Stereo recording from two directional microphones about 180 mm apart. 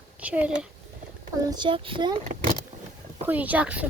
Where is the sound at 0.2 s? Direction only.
5° right (ahead or behind).